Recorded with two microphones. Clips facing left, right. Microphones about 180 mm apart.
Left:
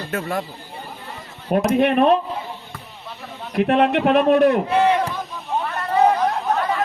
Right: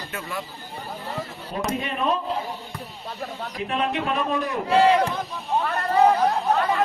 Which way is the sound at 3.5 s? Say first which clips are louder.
Left 10 dB; 65° left (ahead or behind).